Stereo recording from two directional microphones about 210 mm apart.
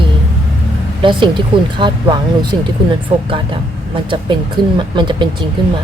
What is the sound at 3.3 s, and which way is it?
Speech, 25° right (ahead or behind).